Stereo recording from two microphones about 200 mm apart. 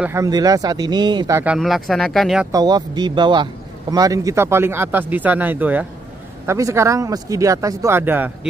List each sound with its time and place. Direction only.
0.0 s speech: 15° right (ahead or behind)
1.4 s speech: 5° right (ahead or behind)
2.5 s speech: 20° right (ahead or behind)